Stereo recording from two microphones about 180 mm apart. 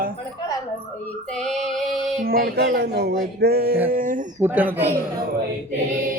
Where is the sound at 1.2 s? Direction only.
5° left (ahead or behind).